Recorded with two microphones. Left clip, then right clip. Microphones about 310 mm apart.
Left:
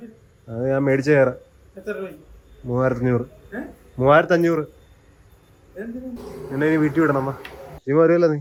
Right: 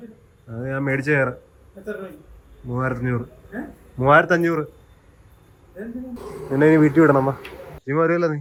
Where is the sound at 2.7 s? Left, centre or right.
Centre.